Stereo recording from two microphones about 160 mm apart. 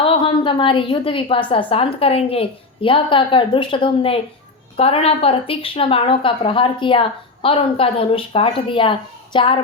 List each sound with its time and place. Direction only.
0.0 s a woman's voice: 35° left (ahead or behind)